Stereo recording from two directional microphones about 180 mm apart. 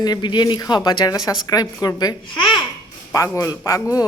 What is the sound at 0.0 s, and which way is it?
A man's voice, 25° left (ahead or behind).